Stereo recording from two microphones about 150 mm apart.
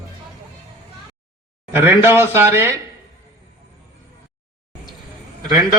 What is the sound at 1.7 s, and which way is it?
Speech, 15° right (ahead or behind).